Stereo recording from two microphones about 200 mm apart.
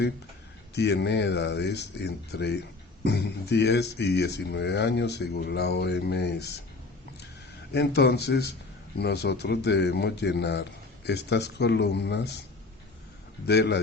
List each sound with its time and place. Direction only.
0.8 s a man's voice: 55° left (ahead or behind)
7.7 s a man's voice: 55° left (ahead or behind)
13.5 s a man's voice: 60° left (ahead or behind)